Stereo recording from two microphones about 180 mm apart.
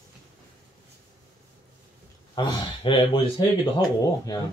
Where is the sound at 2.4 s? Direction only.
25° left (ahead or behind).